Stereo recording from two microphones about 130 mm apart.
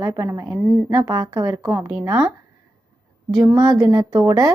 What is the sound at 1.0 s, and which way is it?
Speech, 35° right (ahead or behind).